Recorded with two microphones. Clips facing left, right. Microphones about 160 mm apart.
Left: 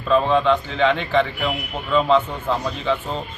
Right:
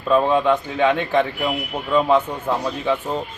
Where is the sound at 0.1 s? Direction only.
10° right (ahead or behind).